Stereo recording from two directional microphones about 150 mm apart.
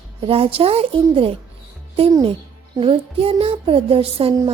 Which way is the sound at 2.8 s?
40° right (ahead or behind).